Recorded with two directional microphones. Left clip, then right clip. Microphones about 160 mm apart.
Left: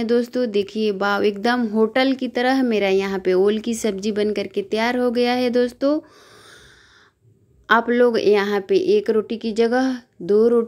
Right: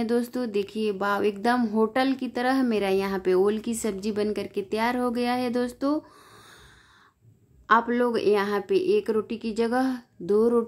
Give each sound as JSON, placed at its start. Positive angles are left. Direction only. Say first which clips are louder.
{"t": 0.0, "sound": "speech", "louder": "left 7 dB", "side_deg": 10}
{"t": 1.6, "sound": "speech", "louder": "left 5 dB", "side_deg": 5}
{"t": 1.9, "sound": "speech", "louder": "left 6 dB", "side_deg": 15}
{"t": 7.6, "sound": "speech", "louder": "left 6 dB", "side_deg": 20}